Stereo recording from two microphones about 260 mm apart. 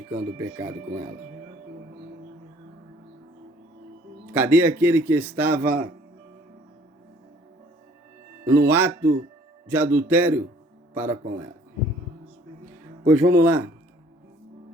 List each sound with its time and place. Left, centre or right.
0.1 s a man's voice: centre
4.3 s a man's voice: centre
5.6 s speech: right
8.4 s a man's voice: centre
13.1 s a man's voice: centre